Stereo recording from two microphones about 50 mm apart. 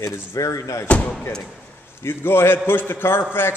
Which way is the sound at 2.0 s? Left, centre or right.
Left.